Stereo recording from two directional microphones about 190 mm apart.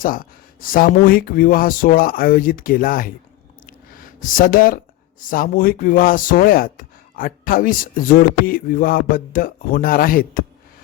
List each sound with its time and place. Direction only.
0.0 s speech: 45° left (ahead or behind)
3.7 s a sound: 45° left (ahead or behind)
5.3 s speech: 50° left (ahead or behind)